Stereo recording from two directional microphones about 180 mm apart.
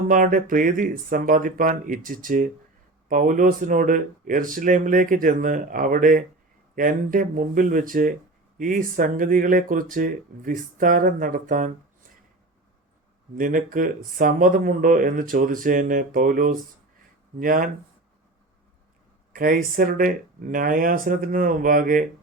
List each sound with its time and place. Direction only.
0.1 s speech: 50° right (ahead or behind)
13.3 s speech: 50° right (ahead or behind)
19.3 s speech: 50° right (ahead or behind)